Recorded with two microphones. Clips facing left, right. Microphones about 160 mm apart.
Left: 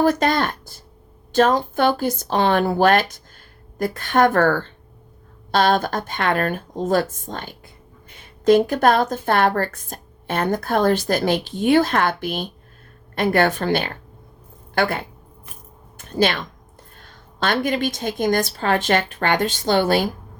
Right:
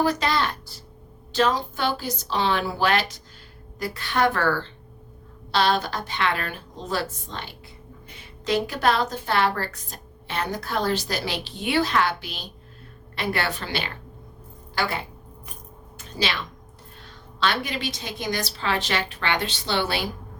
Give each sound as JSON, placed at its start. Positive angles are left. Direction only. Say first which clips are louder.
{"t": 0.0, "sound": "a woman's voice", "louder": "left 5 dB", "side_deg": 50}
{"t": 16.0, "sound": "a sound", "louder": "left 8 dB", "side_deg": 50}
{"t": 17.0, "sound": "a woman's voice", "louder": "even", "side_deg": 50}